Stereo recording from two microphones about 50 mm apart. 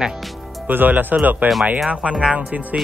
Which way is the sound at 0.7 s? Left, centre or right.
Right.